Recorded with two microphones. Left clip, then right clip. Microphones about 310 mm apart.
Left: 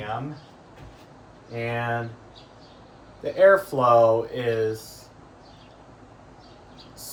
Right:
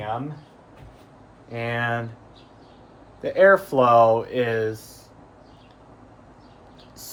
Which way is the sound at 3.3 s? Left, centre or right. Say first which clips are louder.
Right 1 dB; right.